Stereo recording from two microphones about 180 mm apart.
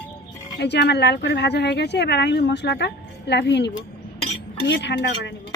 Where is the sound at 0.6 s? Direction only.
70° left (ahead or behind).